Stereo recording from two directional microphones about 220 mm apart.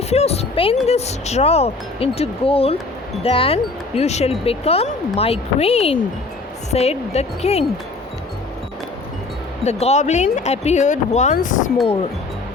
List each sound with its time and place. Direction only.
0.1 s a sound: 30° left (ahead or behind)
0.9 s speech: 30° left (ahead or behind)
9.8 s speech: 30° left (ahead or behind)